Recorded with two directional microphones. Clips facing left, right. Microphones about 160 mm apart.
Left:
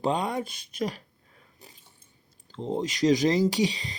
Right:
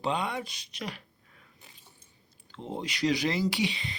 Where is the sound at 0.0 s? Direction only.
45° left (ahead or behind).